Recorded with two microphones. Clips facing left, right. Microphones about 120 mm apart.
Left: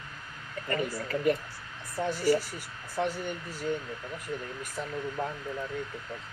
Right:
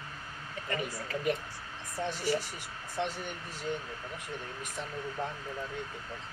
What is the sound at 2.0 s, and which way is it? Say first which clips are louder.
Speech: left 4 dB; 10° left (ahead or behind).